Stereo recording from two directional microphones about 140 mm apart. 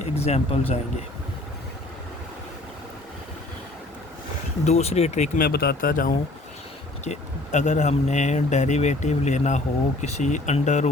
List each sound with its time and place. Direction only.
0.0 s a sound: 50° left (ahead or behind)
4.6 s speech: 50° left (ahead or behind)
5.4 s speech: 90° left
7.0 s speech: 55° left (ahead or behind)